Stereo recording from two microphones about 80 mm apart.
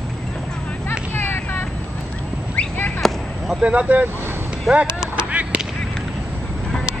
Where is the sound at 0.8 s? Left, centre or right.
Left.